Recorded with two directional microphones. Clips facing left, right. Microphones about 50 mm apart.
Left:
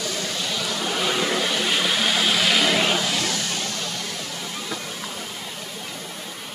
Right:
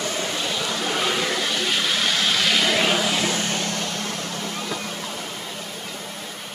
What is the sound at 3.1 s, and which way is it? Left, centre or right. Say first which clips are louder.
Vehicle: right 2 dB; right.